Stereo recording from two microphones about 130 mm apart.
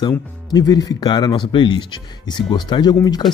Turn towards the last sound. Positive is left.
turn(degrees=30)  # may be behind; listen again after turning